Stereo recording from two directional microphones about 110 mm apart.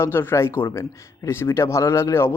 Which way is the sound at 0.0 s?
20° left (ahead or behind).